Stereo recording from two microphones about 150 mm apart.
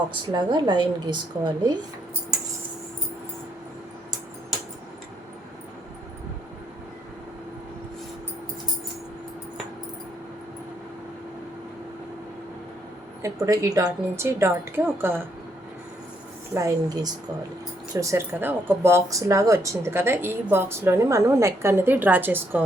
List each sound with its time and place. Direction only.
0.1 s a woman's voice: 30° right (ahead or behind)
13.2 s speech: 20° right (ahead or behind)
16.6 s a woman's voice: 25° right (ahead or behind)